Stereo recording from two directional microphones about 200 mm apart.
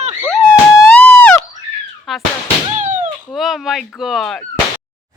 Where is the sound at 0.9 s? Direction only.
5° left (ahead or behind).